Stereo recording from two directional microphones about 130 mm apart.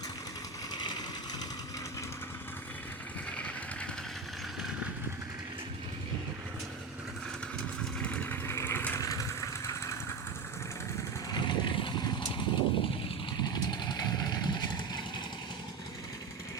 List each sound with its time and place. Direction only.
0.7 s a sound: 35° left (ahead or behind)
3.3 s vehicle: 10° left (ahead or behind)
8.0 s vehicle: 10° left (ahead or behind)
11.3 s vehicle: 35° left (ahead or behind)